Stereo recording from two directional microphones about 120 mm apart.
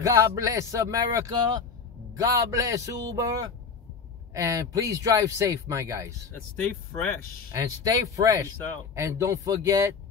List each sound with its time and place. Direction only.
0.0 s speech: 25° right (ahead or behind)
7.5 s speech: 30° right (ahead or behind)